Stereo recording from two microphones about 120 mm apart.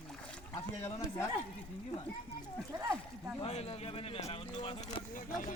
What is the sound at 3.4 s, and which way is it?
Speech, 55° left (ahead or behind).